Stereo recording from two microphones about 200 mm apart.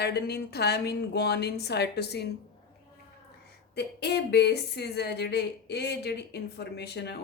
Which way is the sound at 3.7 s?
55° left (ahead or behind).